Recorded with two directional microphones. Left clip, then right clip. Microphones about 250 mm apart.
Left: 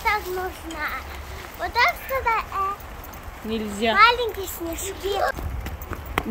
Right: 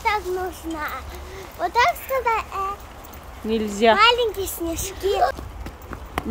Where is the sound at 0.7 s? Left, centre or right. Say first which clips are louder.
Even; right.